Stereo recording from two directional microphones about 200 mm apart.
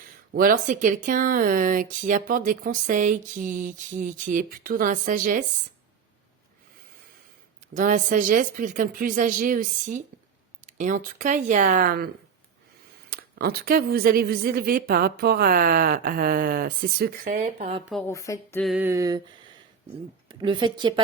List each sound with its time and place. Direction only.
0.3 s speech: 45° right (ahead or behind)
7.7 s speech: 40° right (ahead or behind)
17.6 s speech: 30° right (ahead or behind)
18.0 s speech: 15° left (ahead or behind)
18.6 s a sound: 5° right (ahead or behind)
20.2 s a woman's voice: 25° right (ahead or behind)